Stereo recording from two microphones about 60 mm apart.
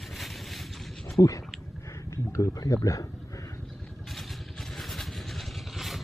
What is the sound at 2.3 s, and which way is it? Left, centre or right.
Speech, left.